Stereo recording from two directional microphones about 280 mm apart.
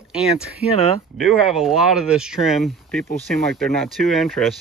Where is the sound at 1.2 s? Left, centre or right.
Centre.